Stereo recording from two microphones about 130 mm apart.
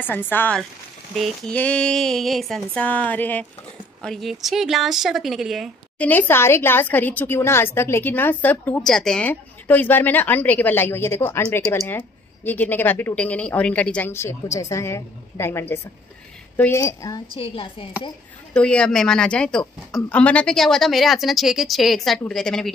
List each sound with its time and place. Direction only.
0.0 s a woman's voice: 15° left (ahead or behind)
4.0 s speech: centre (ahead or behind)
5.9 s a woman's voice: 15° left (ahead or behind)
16.8 s a woman's voice: 30° left (ahead or behind)
17.3 s a woman's voice: 45° left (ahead or behind)
18.5 s a woman's voice: 10° left (ahead or behind)